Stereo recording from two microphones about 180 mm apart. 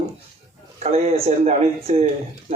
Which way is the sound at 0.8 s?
35° right (ahead or behind).